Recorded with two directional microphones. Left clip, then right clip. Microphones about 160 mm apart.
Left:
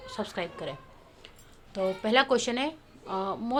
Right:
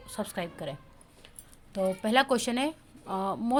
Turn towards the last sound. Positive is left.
turn(degrees=-35)  # may be behind; listen again after turning